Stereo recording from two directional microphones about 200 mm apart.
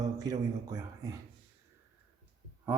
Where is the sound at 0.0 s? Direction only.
20° right (ahead or behind).